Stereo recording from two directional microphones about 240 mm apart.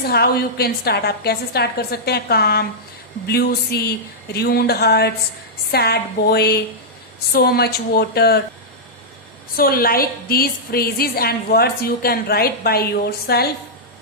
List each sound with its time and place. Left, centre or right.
0.0 s a woman's voice: left
9.6 s a woman's voice: left